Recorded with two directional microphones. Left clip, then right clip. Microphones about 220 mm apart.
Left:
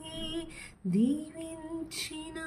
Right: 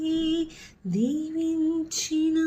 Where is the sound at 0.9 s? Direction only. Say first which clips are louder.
Right 2 dB; 10° left (ahead or behind).